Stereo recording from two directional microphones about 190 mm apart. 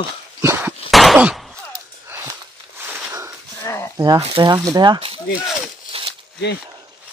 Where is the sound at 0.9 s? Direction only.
Centre (ahead or behind).